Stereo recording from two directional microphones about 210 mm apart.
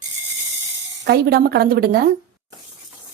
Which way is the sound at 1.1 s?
45° right (ahead or behind).